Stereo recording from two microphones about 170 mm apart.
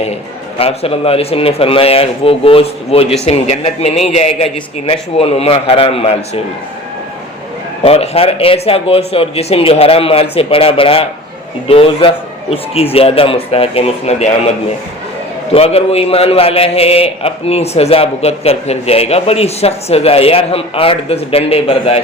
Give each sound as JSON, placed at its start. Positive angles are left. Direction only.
{"t": 0.6, "sound": "a man's voice", "side_deg": 35}
{"t": 7.9, "sound": "a man's voice", "side_deg": 35}
{"t": 15.5, "sound": "a man's voice", "side_deg": 35}